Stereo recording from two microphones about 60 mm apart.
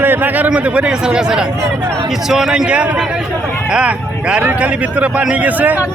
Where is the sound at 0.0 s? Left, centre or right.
Right.